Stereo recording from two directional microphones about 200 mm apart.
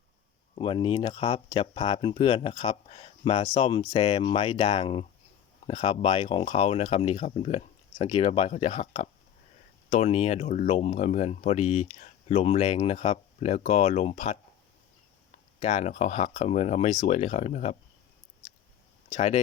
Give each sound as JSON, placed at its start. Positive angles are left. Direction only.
{"t": 0.5, "sound": "speech", "side_deg": 25}
{"t": 15.6, "sound": "speech", "side_deg": 35}
{"t": 19.1, "sound": "speech", "side_deg": 30}